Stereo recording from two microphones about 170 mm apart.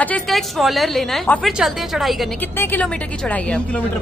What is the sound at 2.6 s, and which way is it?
A woman's voice, 10° left (ahead or behind).